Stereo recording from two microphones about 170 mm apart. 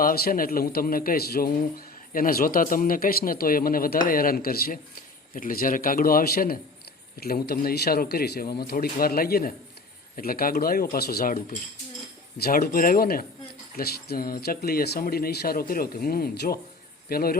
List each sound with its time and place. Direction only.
0.0 s a man's voice: 60° left (ahead or behind)